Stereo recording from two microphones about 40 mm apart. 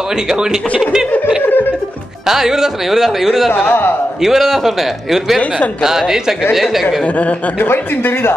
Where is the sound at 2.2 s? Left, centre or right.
Centre.